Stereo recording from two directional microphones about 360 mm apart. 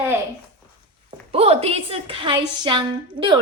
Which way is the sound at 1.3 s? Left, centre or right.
Centre.